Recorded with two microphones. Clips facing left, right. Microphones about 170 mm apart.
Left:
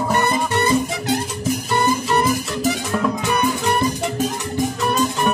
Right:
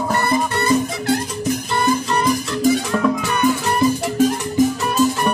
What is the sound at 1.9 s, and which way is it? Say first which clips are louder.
Music: right 2 dB; 5° left (ahead or behind).